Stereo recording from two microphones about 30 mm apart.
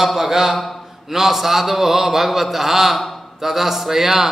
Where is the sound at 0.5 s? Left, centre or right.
Centre.